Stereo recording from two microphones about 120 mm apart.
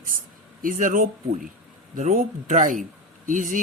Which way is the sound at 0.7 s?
90° right.